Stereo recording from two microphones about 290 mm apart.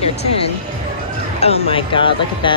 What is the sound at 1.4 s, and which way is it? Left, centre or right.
A woman's voice, centre.